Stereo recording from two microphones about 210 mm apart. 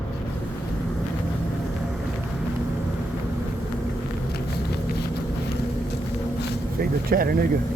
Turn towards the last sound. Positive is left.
turn(degrees=-45)  # may be behind; listen again after turning